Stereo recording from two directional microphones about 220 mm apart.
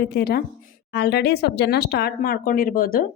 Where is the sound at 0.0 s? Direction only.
45° left (ahead or behind).